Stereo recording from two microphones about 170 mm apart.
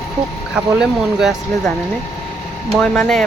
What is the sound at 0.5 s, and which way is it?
Speech, 5° right (ahead or behind).